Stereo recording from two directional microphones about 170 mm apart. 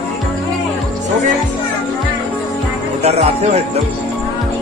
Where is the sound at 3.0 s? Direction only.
40° right (ahead or behind).